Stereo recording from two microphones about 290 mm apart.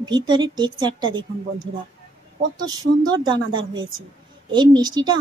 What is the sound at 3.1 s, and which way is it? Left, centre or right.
A woman's voice, centre.